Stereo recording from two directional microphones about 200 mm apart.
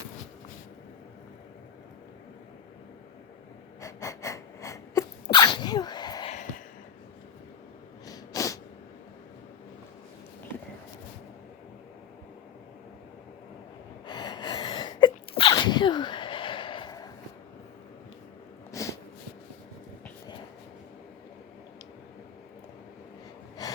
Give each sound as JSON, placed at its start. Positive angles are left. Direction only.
{"t": 3.8, "sound": "sneeze", "side_deg": 15}
{"t": 8.0, "sound": "sneeze", "side_deg": 20}
{"t": 14.1, "sound": "sneeze", "side_deg": 20}
{"t": 18.7, "sound": "snort", "side_deg": 15}
{"t": 23.6, "sound": "gasp", "side_deg": 20}